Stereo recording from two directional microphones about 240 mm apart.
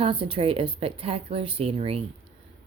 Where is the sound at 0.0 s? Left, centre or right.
Right.